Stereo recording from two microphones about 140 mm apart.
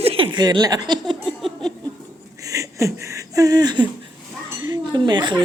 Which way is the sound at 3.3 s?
25° right (ahead or behind).